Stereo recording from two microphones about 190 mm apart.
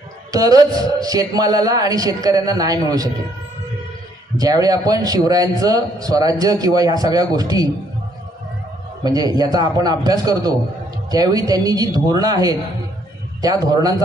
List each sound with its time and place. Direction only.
0.3 s a man's voice: 20° right (ahead or behind)
4.4 s a man's voice: 20° right (ahead or behind)
9.0 s a man's voice: 20° right (ahead or behind)